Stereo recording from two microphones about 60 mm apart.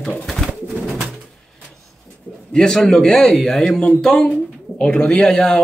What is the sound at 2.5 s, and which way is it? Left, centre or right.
Speech, centre.